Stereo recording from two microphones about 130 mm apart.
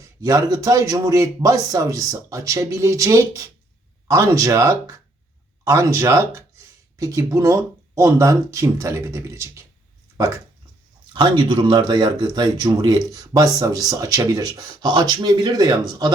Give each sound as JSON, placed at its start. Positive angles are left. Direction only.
{"t": 0.2, "sound": "speech", "side_deg": -30}
{"t": 11.1, "sound": "speech", "side_deg": -40}